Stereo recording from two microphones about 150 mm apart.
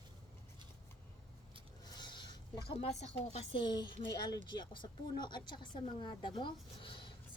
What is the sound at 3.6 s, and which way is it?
Speech, 30° left (ahead or behind).